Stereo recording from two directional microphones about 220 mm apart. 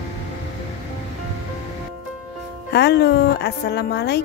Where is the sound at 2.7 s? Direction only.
50° left (ahead or behind).